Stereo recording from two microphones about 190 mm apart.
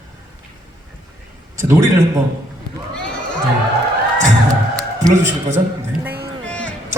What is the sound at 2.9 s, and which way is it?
Sheep, 5° left (ahead or behind).